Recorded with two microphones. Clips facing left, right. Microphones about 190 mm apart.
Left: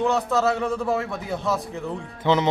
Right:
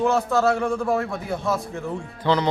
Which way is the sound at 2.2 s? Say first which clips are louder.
Left 1 dB; 20° left (ahead or behind).